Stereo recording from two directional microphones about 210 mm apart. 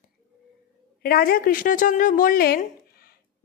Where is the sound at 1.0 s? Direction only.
45° left (ahead or behind).